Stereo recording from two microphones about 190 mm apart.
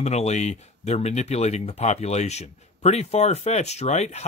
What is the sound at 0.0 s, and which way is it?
Speech, 35° left (ahead or behind).